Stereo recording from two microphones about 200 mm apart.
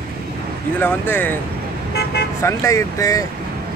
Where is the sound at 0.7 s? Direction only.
10° left (ahead or behind).